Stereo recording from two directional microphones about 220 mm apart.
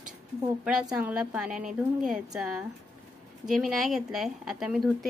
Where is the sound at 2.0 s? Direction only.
Centre (ahead or behind).